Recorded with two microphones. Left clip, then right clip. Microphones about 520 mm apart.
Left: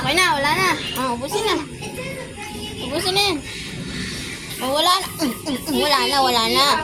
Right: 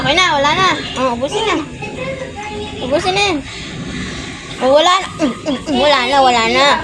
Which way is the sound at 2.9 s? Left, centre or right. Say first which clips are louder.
Right 5 dB; centre.